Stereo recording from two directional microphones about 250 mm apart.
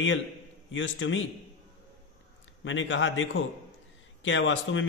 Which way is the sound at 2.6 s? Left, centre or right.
Left.